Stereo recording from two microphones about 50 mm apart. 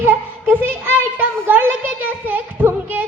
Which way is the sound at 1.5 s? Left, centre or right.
Right.